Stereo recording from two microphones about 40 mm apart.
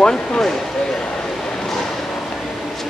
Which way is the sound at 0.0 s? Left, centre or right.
Centre.